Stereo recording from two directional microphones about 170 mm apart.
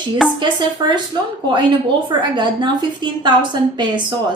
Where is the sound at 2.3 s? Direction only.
25° right (ahead or behind).